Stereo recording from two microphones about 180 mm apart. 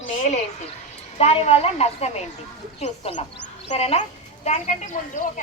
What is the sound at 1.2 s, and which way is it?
Speech, 35° left (ahead or behind).